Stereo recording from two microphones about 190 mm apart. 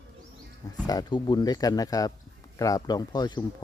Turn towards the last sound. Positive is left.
turn(degrees=20)  # may be behind; listen again after turning